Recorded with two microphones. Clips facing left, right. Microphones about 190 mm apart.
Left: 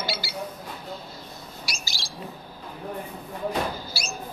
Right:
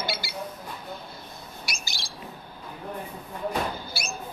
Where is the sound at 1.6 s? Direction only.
55° right (ahead or behind).